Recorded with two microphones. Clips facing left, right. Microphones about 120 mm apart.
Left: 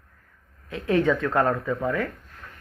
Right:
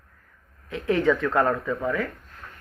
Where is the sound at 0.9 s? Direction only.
30° left (ahead or behind).